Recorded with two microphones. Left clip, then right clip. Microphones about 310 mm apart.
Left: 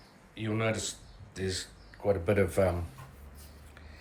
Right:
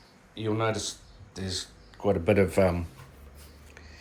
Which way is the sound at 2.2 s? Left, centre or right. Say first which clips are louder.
Right 7 dB; right.